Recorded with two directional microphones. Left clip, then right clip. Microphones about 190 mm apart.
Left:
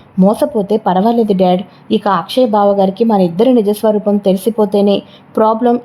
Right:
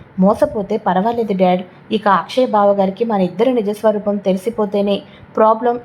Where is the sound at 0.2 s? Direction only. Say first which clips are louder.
Left 2 dB; 35° left (ahead or behind).